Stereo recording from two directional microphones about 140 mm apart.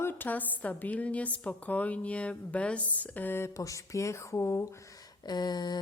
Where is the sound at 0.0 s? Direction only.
15° left (ahead or behind).